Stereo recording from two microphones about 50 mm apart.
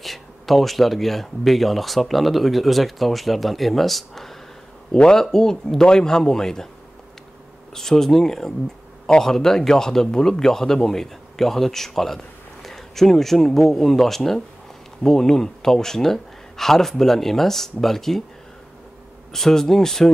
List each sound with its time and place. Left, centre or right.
0.0 s a man's voice: centre
7.7 s a man's voice: centre
19.3 s a man's voice: centre